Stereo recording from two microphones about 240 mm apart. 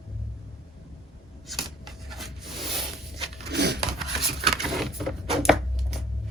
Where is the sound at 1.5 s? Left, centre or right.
Centre.